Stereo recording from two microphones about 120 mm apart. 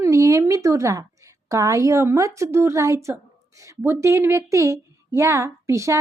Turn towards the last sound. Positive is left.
turn(degrees=-25)  # may be behind; listen again after turning